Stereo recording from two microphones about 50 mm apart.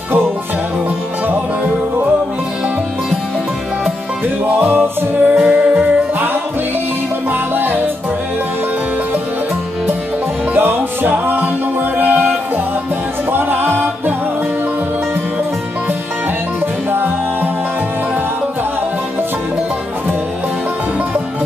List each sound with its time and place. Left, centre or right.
4.6 s music: right
5.2 s music: right
7.2 s music: right
10.5 s music: right
13.3 s music: right
16.9 s music: right